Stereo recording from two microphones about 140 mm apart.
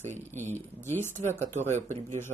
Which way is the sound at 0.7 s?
15° left (ahead or behind).